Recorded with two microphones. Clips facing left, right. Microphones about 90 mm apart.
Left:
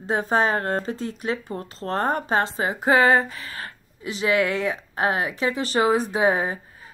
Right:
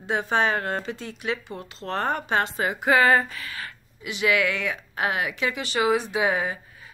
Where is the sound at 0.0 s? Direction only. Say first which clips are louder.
Left 2 dB; 40° left (ahead or behind).